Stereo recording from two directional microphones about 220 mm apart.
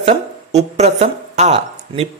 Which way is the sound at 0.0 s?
30° right (ahead or behind).